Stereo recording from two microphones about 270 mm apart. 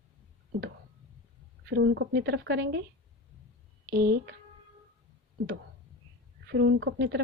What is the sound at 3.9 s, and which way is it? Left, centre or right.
Speech, right.